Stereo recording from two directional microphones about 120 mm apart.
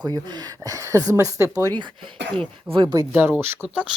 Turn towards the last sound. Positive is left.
turn(degrees=-10)  # may be behind; listen again after turning